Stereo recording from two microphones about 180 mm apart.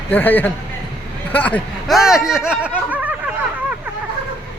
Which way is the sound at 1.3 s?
10° left (ahead or behind).